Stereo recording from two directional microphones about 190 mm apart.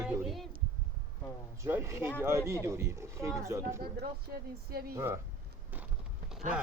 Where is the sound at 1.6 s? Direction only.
15° right (ahead or behind).